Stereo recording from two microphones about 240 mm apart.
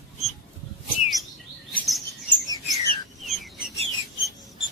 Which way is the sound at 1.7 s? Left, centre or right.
Centre.